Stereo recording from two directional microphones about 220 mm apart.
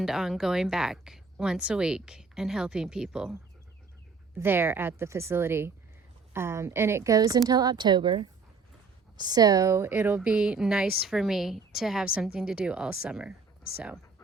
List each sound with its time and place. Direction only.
0.0 s speech: centre (ahead or behind)
4.4 s a woman's voice: 10° right (ahead or behind)